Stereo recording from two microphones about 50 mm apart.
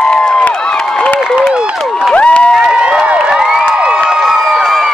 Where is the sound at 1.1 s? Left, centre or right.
Centre.